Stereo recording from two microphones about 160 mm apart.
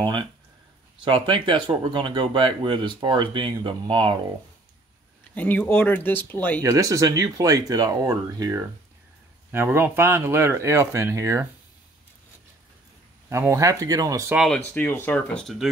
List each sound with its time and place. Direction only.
0.0 s speech: 25° right (ahead or behind)
5.3 s speech: 10° left (ahead or behind)
6.6 s speech: 20° right (ahead or behind)
13.3 s speech: 15° right (ahead or behind)
14.3 s speech: centre (ahead or behind)
14.6 s speech: 10° left (ahead or behind)